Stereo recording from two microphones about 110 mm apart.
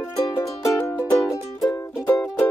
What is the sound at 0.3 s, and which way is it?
Music, 25° left (ahead or behind).